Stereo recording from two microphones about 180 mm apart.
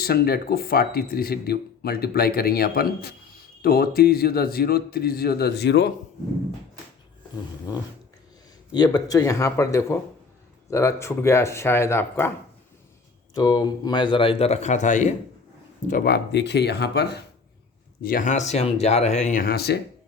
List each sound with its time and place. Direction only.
0.0 s speech: 60° left (ahead or behind)
8.7 s speech: 20° left (ahead or behind)
13.3 s speech: 20° left (ahead or behind); by 15.1 s 40° left (ahead or behind)
15.9 s speech: 55° left (ahead or behind)
18.0 s speech: 50° left (ahead or behind)